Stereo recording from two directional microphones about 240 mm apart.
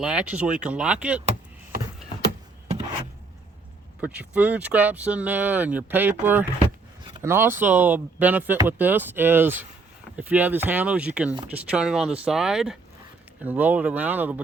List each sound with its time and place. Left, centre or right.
0.0 s speech: centre
2.6 s a sound: right
4.0 s speech: centre